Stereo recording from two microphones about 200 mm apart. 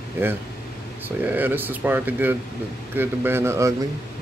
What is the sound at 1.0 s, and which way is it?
Speech, 10° right (ahead or behind).